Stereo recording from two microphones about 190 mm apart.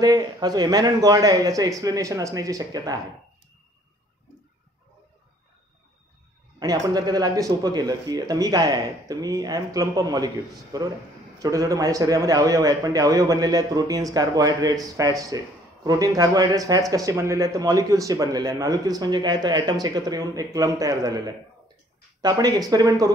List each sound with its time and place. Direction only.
0.0 s a man's voice: 20° right (ahead or behind)
6.6 s a man's voice: 20° right (ahead or behind)
22.2 s a man's voice: 20° right (ahead or behind)